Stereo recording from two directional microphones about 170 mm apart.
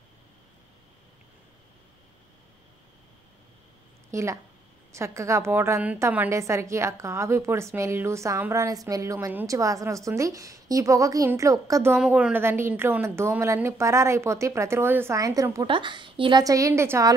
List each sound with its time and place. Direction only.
4.1 s a woman's voice: 15° right (ahead or behind)